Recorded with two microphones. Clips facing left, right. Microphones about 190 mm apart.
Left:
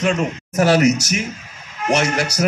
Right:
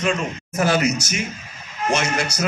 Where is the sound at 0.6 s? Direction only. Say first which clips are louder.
Left 5 dB; 75° left (ahead or behind).